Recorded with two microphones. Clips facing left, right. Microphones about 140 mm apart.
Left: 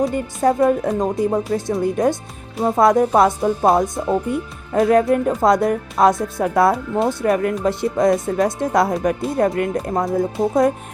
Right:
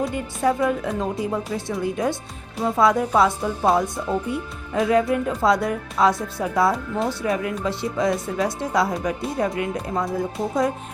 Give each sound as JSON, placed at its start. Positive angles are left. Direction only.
{"t": 0.1, "sound": "speech", "side_deg": 45}